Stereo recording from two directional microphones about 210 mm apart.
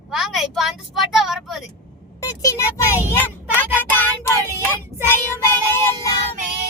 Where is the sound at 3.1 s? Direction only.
10° left (ahead or behind).